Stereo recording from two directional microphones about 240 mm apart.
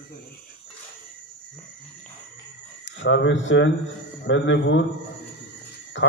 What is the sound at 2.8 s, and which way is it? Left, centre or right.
Speech, left.